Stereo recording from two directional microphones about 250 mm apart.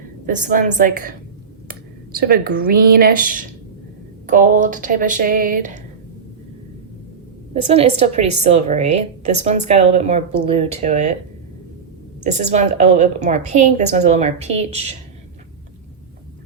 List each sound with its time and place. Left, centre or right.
0.3 s speech: right
2.1 s speech: right
7.5 s a woman's voice: right
12.2 s a woman's voice: right